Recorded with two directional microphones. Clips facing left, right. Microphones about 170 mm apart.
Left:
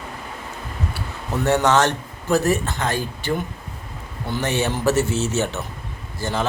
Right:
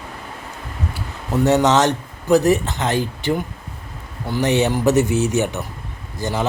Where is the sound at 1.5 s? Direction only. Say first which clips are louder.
Right 2 dB; 20° right (ahead or behind).